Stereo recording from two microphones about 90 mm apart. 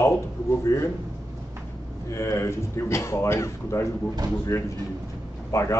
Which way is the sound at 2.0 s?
35° left (ahead or behind).